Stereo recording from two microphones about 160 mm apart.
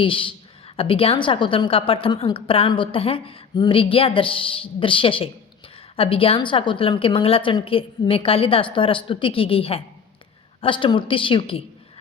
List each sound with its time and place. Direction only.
0.0 s a woman's voice: 35° left (ahead or behind)